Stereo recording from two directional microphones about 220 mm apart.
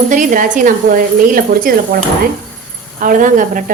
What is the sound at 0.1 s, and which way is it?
A woman's voice, 35° right (ahead or behind).